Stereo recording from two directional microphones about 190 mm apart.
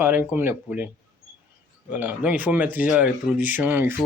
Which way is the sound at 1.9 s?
10° right (ahead or behind).